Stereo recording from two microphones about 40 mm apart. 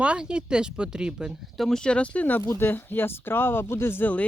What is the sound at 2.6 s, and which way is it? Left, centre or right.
Speech, left.